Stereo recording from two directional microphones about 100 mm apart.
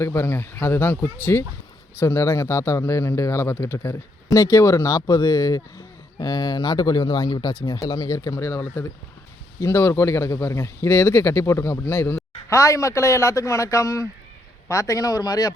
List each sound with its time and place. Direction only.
0.0 s speech: 25° left (ahead or behind)